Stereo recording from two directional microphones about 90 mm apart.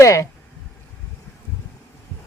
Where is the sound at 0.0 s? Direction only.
35° left (ahead or behind).